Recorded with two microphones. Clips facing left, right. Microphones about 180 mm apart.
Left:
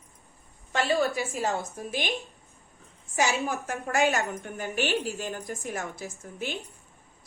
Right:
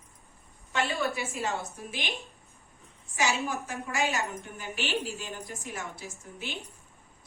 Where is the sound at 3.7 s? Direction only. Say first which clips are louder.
Left 10 dB; 55° left (ahead or behind).